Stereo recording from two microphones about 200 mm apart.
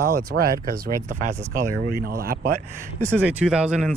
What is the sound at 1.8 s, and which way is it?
Speech, 50° right (ahead or behind).